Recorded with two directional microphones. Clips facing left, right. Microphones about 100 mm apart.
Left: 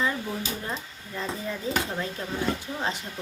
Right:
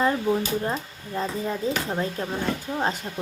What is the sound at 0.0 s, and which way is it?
A child's voice, 35° right (ahead or behind).